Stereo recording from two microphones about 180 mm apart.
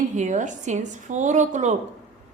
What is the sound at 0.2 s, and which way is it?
A woman's voice, 40° right (ahead or behind).